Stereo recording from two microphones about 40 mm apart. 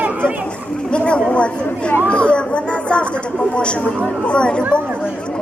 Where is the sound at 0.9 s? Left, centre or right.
Left.